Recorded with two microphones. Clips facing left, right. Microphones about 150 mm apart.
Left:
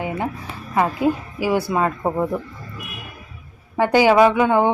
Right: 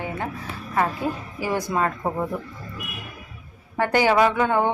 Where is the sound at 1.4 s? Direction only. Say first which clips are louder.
Left 1 dB; 10° left (ahead or behind).